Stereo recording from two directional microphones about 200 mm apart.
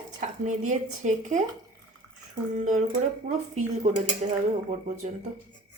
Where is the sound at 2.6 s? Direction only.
40° right (ahead or behind).